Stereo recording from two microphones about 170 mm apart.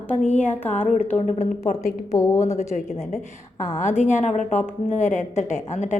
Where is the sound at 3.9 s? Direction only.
15° left (ahead or behind).